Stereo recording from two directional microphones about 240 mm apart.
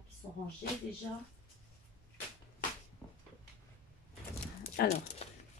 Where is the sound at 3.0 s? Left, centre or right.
Centre.